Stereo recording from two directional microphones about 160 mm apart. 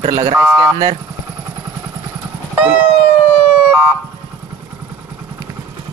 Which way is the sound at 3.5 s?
5° right (ahead or behind).